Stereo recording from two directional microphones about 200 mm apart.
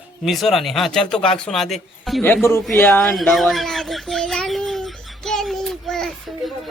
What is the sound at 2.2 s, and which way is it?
Speech, 10° left (ahead or behind).